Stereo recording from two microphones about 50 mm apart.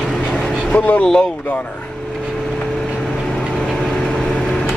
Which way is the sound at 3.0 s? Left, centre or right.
Centre.